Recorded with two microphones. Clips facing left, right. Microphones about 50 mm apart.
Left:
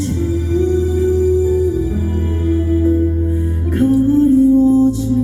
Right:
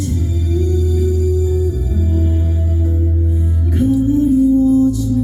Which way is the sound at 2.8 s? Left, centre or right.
Left.